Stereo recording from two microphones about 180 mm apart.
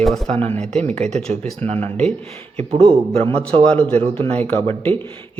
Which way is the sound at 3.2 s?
35° right (ahead or behind).